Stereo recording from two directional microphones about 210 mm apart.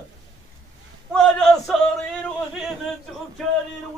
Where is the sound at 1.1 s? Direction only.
5° left (ahead or behind).